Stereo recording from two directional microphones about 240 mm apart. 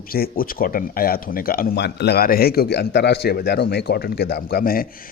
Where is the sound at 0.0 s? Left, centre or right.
Left.